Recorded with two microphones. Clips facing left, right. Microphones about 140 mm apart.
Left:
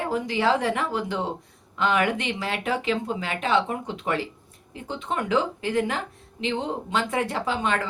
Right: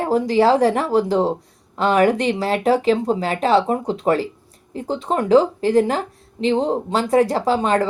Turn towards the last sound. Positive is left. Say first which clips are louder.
# right 8 dB
turn(degrees=-35)  # may be behind; listen again after turning